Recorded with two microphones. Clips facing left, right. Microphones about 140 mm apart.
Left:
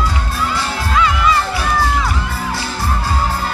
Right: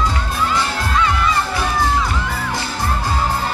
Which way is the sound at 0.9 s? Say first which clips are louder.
Left 3 dB; 90° left.